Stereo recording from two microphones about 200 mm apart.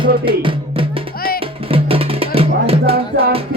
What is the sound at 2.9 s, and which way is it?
Music, 50° right (ahead or behind).